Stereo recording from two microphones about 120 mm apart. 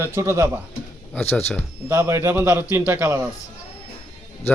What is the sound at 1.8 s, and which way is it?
Speech, 25° right (ahead or behind).